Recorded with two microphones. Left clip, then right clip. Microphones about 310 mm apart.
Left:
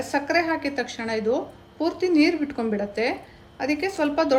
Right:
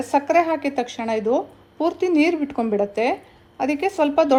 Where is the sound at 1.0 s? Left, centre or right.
Centre.